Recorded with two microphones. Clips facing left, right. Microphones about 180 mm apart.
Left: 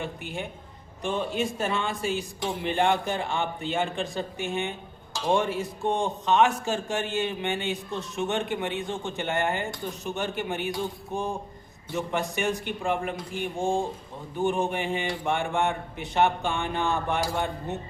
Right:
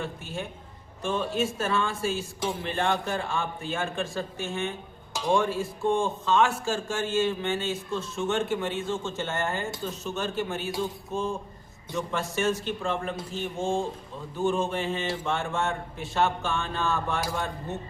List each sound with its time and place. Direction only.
0.0 s a man's voice: 15° left (ahead or behind)